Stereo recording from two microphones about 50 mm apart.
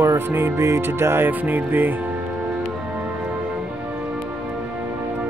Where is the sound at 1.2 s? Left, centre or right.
Right.